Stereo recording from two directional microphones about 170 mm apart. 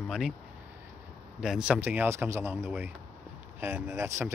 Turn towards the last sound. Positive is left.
turn(degrees=-15)  # may be behind; listen again after turning